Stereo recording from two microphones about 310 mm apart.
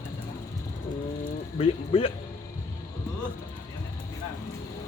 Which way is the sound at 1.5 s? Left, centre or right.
Centre.